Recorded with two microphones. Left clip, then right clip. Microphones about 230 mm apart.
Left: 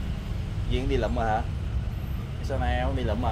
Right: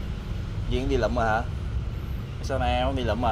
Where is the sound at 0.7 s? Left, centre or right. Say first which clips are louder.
Right 3 dB; centre.